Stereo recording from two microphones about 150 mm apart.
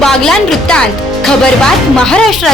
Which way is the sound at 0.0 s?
5° left (ahead or behind).